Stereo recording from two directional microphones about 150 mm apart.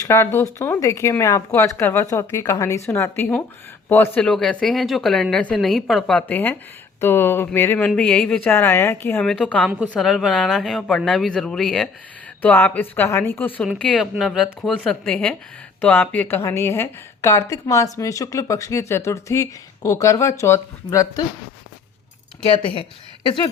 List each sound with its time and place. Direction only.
0.0 s a woman's voice: 20° left (ahead or behind)
8.5 s a woman's voice: 15° left (ahead or behind)
22.6 s speech: 35° left (ahead or behind)